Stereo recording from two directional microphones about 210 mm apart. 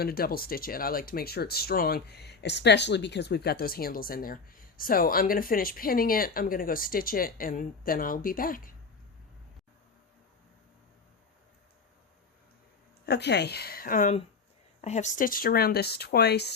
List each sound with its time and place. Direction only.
0.0 s speech: 45° left (ahead or behind)
13.1 s speech: 55° left (ahead or behind)